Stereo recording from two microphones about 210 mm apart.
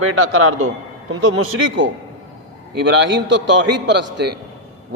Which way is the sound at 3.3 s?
60° right (ahead or behind).